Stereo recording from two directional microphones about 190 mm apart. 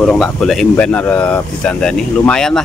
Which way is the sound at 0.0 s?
Centre (ahead or behind).